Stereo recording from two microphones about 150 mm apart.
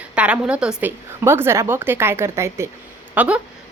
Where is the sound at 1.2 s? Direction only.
15° right (ahead or behind).